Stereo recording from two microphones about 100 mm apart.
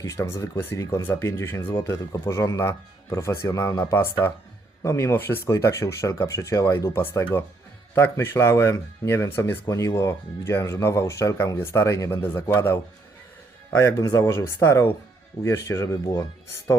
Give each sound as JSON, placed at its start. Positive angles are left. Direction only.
{"t": 0.0, "sound": "speech", "side_deg": 30}